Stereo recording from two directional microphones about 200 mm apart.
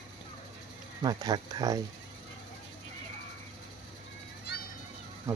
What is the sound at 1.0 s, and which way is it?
Speech, 20° right (ahead or behind).